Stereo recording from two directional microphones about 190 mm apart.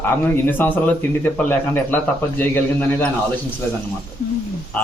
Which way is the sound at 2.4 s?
10° left (ahead or behind).